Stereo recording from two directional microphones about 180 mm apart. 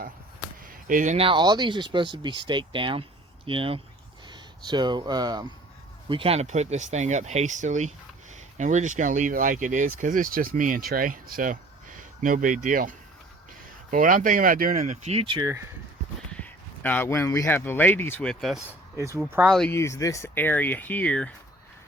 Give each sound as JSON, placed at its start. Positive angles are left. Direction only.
{"t": 0.6, "sound": "speech", "side_deg": -50}
{"t": 16.3, "sound": "speech", "side_deg": 10}
{"t": 18.9, "sound": "speech", "side_deg": -15}
{"t": 19.5, "sound": "speech", "side_deg": 0}
{"t": 19.7, "sound": "speech", "side_deg": 15}